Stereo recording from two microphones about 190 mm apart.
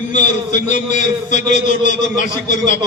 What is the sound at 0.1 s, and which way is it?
A man's voice, 40° left (ahead or behind).